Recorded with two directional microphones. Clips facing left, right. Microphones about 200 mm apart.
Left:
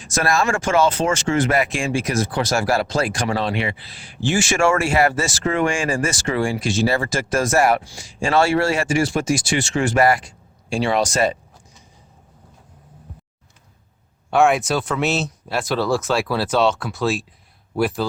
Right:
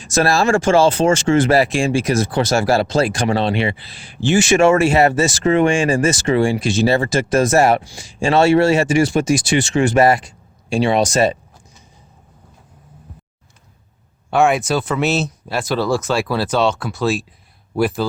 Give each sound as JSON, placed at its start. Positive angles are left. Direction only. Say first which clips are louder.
{"t": 0.0, "sound": "speech", "louder": "right 4 dB", "side_deg": -30}
{"t": 14.3, "sound": "speech", "louder": "right 1 dB", "side_deg": 0}